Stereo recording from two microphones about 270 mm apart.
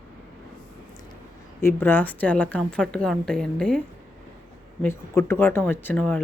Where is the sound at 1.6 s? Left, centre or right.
Centre.